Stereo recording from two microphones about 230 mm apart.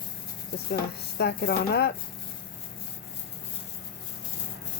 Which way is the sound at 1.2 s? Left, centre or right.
Left.